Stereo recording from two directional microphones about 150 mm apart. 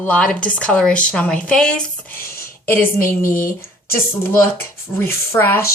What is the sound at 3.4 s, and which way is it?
Speech, 80° left.